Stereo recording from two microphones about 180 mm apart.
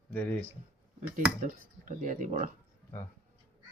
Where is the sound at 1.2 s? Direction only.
45° right (ahead or behind).